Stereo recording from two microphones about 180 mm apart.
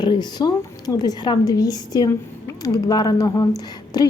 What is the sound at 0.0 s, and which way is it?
A woman's voice, 25° left (ahead or behind).